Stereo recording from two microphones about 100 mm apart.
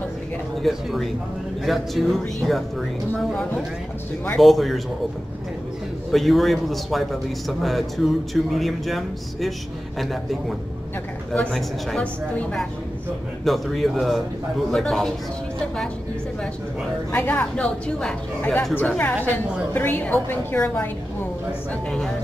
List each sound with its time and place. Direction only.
0.6 s a man's voice: centre (ahead or behind)
4.4 s a man's voice: centre (ahead or behind)
6.1 s a man's voice: centre (ahead or behind)
11.3 s a woman's voice: 10° left (ahead or behind)
17.1 s a woman's voice: 20° left (ahead or behind)
18.8 s a woman's voice: 20° left (ahead or behind)